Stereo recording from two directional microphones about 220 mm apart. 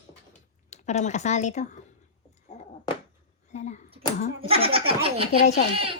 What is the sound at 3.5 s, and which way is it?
Speech, 30° left (ahead or behind).